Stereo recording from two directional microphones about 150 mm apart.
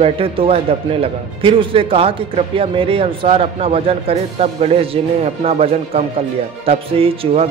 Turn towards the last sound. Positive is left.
turn(degrees=-40)  # may be behind; listen again after turning